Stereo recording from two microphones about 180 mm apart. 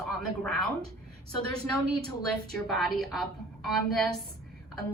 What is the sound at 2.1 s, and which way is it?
A woman's voice, centre (ahead or behind).